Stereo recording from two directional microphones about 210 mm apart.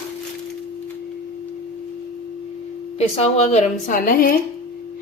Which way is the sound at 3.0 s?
30° left (ahead or behind).